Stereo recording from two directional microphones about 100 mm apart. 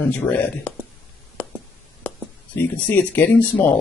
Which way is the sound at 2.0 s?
20° left (ahead or behind).